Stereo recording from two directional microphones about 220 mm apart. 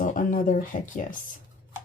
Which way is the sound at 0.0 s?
35° left (ahead or behind).